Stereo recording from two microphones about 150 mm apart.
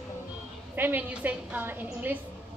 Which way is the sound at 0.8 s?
10° right (ahead or behind).